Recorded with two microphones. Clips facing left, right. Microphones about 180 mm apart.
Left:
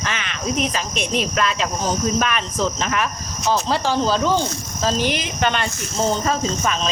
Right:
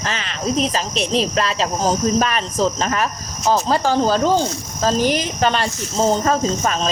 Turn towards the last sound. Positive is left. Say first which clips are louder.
# right 3 dB
turn(degrees=-40)  # may be behind; listen again after turning